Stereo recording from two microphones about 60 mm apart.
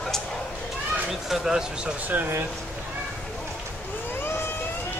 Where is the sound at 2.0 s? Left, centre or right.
Right.